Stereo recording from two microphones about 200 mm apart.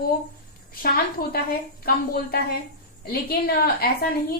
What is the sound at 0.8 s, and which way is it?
A woman's voice, 50° left (ahead or behind).